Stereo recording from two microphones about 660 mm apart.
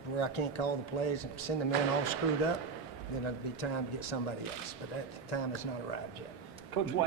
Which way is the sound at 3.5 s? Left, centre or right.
Left.